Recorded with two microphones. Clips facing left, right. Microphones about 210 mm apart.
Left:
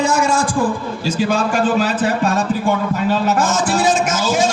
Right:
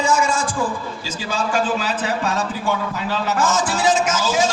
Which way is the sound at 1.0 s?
60° left (ahead or behind).